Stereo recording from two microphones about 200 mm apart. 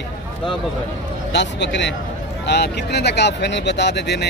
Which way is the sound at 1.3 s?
60° left (ahead or behind).